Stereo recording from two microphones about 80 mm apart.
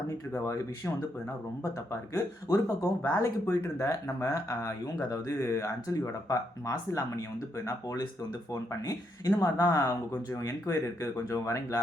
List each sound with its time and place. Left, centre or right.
0.1 s speech: left
1.9 s speech: left